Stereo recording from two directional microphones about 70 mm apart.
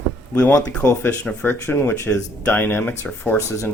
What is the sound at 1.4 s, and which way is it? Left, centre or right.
Speech, left.